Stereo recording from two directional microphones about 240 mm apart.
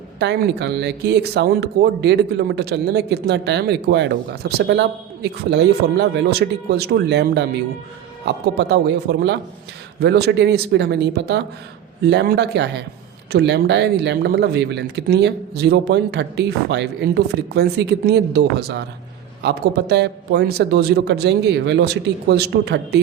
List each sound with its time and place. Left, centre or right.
0.2 s speech: right